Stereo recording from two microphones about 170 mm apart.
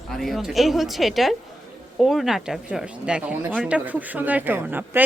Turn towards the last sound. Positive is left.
turn(degrees=-10)  # may be behind; listen again after turning